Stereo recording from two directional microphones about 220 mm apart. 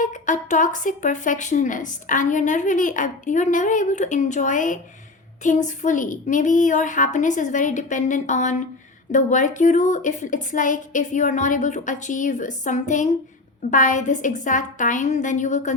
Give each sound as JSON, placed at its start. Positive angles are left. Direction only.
{"t": 0.0, "sound": "a woman's voice", "side_deg": 35}